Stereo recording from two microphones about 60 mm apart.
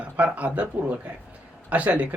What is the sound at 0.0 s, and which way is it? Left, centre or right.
Speech, right.